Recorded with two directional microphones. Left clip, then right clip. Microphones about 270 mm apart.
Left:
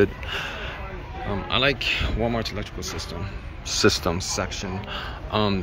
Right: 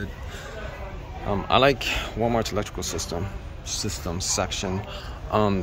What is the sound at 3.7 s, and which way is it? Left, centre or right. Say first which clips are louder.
Speech: left 10 dB; centre.